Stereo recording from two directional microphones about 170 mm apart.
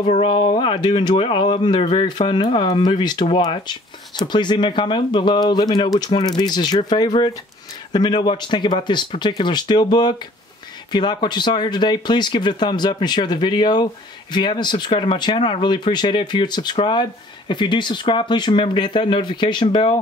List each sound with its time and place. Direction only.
0.0 s speech: 30° left (ahead or behind)